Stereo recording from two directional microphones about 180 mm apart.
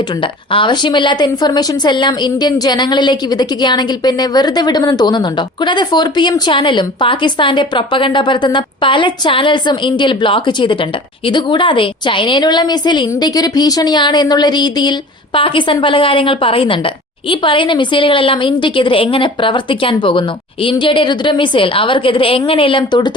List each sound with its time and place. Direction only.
0.2 s a woman's voice: 30° left (ahead or behind)